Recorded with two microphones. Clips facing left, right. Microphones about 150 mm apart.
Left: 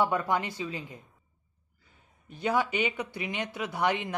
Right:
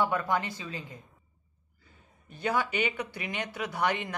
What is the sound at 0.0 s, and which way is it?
Speech, 15° left (ahead or behind).